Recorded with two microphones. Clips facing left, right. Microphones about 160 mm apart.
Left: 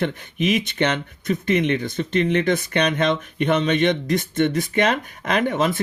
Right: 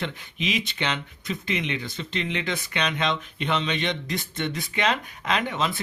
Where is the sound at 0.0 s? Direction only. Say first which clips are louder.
Left 8 dB; 50° left (ahead or behind).